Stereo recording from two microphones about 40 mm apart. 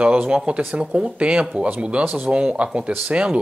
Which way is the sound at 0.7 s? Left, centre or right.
Right.